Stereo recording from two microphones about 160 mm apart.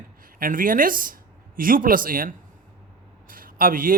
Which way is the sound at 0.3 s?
60° right (ahead or behind).